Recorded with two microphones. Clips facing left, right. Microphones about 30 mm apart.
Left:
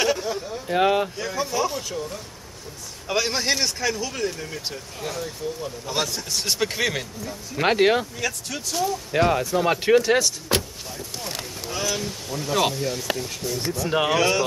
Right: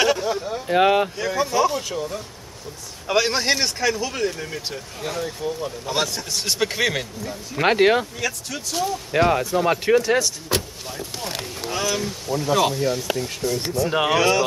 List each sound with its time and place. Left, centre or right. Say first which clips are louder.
0.0 s a sound: right 3 dB; centre
0.7 s speech: right 3 dB; centre
3.1 s a man's voice: right 3 dB; centre
10.9 s a man's voice: right 6 dB; centre